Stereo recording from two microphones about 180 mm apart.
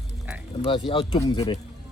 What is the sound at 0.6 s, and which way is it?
Speech, 30° left (ahead or behind).